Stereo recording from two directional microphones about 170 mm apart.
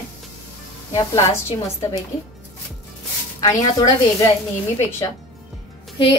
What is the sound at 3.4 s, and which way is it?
Speech, 20° left (ahead or behind).